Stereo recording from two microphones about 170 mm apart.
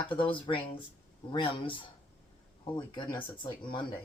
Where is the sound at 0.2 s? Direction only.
30° left (ahead or behind).